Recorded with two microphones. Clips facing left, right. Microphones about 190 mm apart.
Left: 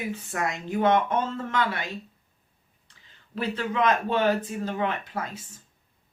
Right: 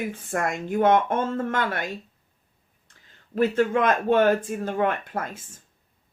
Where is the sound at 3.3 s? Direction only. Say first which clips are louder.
Right 7 dB; 50° right (ahead or behind).